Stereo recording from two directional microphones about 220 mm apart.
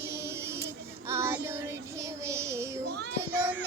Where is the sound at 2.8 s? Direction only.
50° right (ahead or behind).